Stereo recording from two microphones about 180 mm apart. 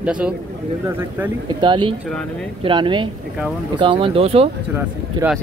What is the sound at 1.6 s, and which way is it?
Speech, 25° right (ahead or behind).